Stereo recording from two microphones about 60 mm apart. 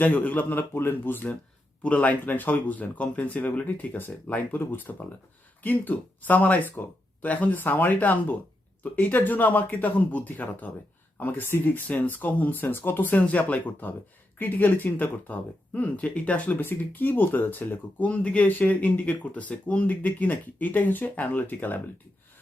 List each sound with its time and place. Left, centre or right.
0.0 s speech: left
18.1 s speech: left